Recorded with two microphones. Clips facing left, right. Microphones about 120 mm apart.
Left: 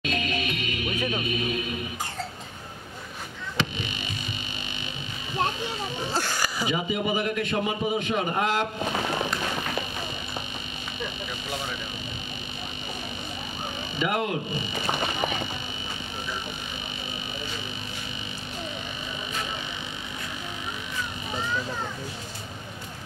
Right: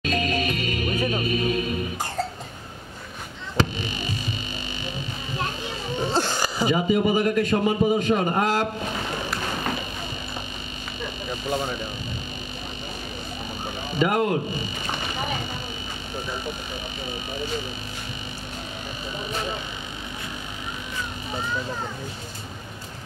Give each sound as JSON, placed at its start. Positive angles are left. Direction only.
{"t": 0.0, "sound": "music", "side_deg": -40}
{"t": 3.5, "sound": "a sound", "side_deg": -40}
{"t": 6.1, "sound": "a sound", "side_deg": -25}
{"t": 6.7, "sound": "a man's voice", "side_deg": -40}
{"t": 11.2, "sound": "speech", "side_deg": -35}
{"t": 13.9, "sound": "a man's voice", "side_deg": -40}